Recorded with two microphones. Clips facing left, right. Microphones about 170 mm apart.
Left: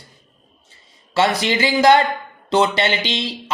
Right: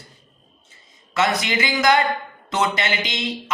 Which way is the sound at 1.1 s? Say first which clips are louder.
Left 3 dB; 30° left (ahead or behind).